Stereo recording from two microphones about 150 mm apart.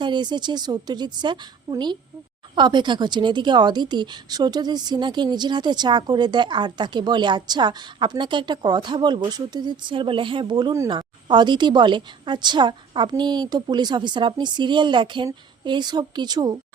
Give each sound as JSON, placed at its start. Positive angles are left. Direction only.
{"t": 0.0, "sound": "a woman's voice", "side_deg": -30}